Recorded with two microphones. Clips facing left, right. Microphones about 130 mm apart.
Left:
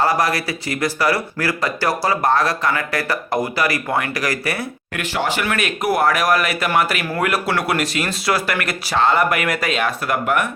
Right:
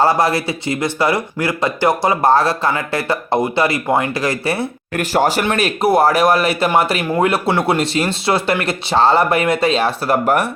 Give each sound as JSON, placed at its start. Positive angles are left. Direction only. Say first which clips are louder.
{"t": 0.0, "sound": "speech", "louder": "right 4 dB", "side_deg": -25}
{"t": 4.9, "sound": "speech", "louder": "right 6 dB", "side_deg": -40}